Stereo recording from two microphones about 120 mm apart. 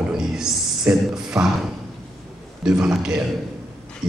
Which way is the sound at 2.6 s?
5° right (ahead or behind).